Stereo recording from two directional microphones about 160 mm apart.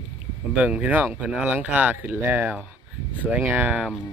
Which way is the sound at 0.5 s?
10° right (ahead or behind).